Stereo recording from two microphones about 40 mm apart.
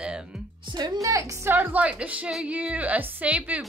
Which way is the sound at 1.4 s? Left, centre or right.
Right.